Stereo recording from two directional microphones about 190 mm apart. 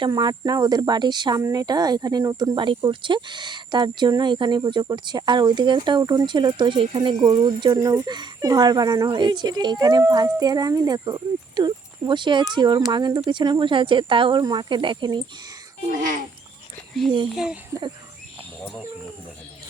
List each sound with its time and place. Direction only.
0.0 s speech: 25° right (ahead or behind)
15.9 s speech: 45° right (ahead or behind)
17.3 s speech: 5° right (ahead or behind)